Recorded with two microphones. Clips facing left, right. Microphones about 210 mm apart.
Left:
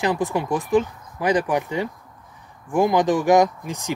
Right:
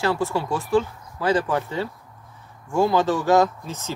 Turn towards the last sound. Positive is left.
turn(degrees=15)  # may be behind; listen again after turning